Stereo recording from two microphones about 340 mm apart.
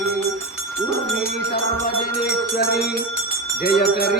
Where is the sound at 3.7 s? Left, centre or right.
Left.